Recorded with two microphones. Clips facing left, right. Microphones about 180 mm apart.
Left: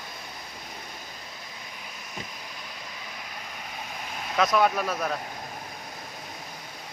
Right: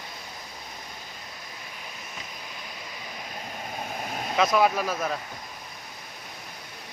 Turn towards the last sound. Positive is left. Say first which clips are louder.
# even
turn(degrees=0)  # may be behind; listen again after turning